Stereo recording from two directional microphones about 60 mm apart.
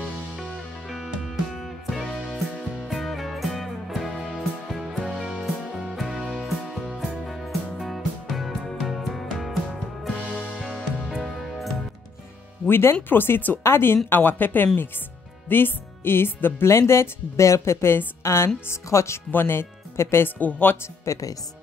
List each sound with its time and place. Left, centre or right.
0.4 s music: centre
10.6 s music: centre
12.6 s speech: left
13.6 s a woman's voice: left
16.6 s a woman's voice: left
19.3 s speech: left
20.3 s speech: left
21.0 s speech: left